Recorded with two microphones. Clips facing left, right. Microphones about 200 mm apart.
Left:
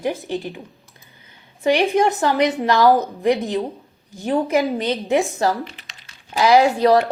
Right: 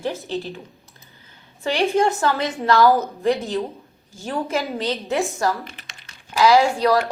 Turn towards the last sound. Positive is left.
turn(degrees=20)  # may be behind; listen again after turning